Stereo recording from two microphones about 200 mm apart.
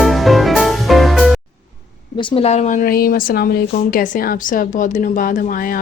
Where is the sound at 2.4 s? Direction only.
35° left (ahead or behind).